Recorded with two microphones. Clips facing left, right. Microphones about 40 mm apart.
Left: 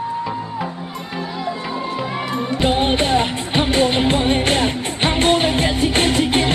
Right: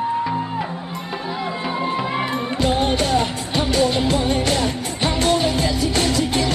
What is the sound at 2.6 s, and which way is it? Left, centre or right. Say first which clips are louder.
Music: left 2 dB; left.